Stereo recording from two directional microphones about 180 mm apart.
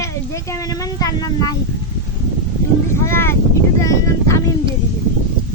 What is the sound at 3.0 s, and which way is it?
Speech, 15° left (ahead or behind).